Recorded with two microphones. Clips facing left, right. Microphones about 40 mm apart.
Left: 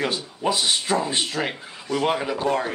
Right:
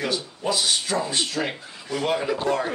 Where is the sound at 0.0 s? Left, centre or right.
Left.